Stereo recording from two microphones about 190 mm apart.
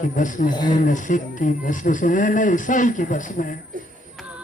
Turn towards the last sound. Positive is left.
turn(degrees=45)  # may be behind; listen again after turning